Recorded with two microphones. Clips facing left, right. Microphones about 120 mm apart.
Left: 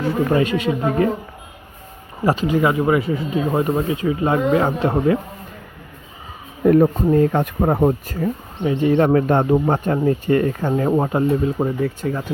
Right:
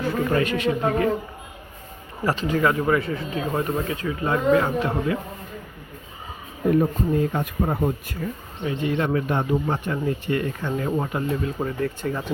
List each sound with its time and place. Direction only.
0.3 s speech: 20° left (ahead or behind)
2.2 s speech: 15° left (ahead or behind)
3.5 s speech: 25° left (ahead or behind)
6.7 s speech: 60° left (ahead or behind); by 9.1 s 35° left (ahead or behind)
9.1 s speech: 50° left (ahead or behind); by 11.5 s 30° left (ahead or behind)
11.8 s speech: centre (ahead or behind)